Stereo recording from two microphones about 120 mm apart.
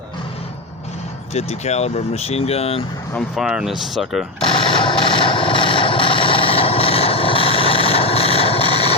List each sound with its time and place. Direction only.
1.3 s speech: 65° left (ahead or behind)
3.2 s speech: 5° right (ahead or behind)
4.4 s a sound: 45° left (ahead or behind)